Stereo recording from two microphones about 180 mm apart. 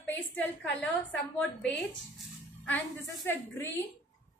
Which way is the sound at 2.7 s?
10° left (ahead or behind).